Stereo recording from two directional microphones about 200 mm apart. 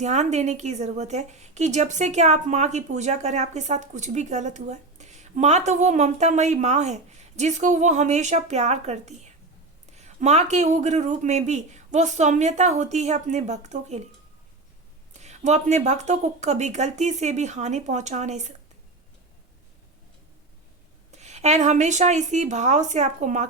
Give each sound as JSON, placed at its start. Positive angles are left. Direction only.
{"t": 0.0, "sound": "a woman's voice", "side_deg": -35}
{"t": 15.2, "sound": "a woman's voice", "side_deg": -35}
{"t": 21.2, "sound": "a woman's voice", "side_deg": -35}